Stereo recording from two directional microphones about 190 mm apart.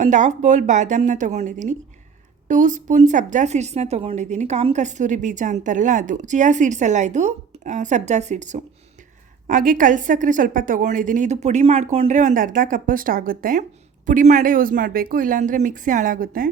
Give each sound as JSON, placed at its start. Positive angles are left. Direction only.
{"t": 0.0, "sound": "a woman's voice", "side_deg": -40}